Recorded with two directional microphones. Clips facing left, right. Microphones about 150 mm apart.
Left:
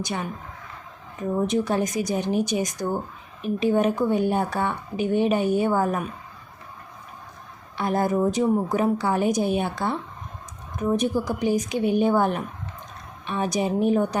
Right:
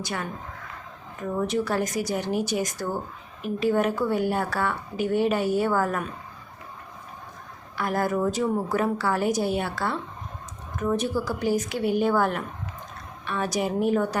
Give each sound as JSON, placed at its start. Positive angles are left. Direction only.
{"t": 0.0, "sound": "a woman's voice", "side_deg": 20}
{"t": 1.4, "sound": "a woman's voice", "side_deg": 20}
{"t": 7.8, "sound": "a woman's voice", "side_deg": 20}